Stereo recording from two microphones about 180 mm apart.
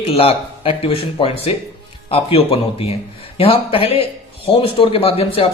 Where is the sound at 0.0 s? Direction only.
30° left (ahead or behind).